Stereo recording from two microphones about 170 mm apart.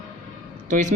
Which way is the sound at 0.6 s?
50° right (ahead or behind).